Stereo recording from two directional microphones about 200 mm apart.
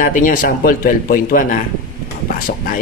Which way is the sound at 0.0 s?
45° left (ahead or behind).